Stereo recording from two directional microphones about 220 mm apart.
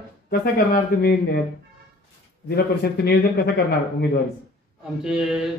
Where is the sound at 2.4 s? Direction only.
45° left (ahead or behind).